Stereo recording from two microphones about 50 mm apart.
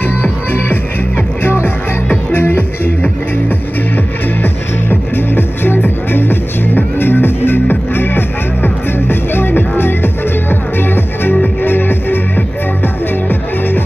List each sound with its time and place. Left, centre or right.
0.2 s music: left